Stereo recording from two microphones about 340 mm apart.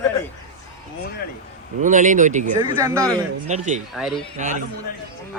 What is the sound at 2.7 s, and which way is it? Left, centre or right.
Speech, centre.